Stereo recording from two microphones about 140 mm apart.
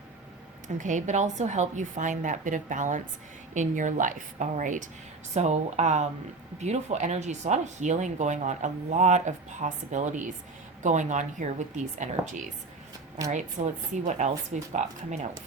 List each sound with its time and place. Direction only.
0.8 s speech: 60° right (ahead or behind)
5.3 s speech: 55° right (ahead or behind)
13.9 s speech: 60° right (ahead or behind)